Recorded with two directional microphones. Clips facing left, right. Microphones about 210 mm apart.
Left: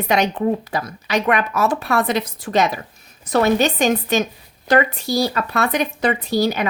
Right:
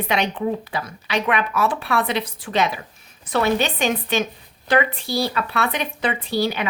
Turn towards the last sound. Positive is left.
turn(degrees=40)  # may be behind; listen again after turning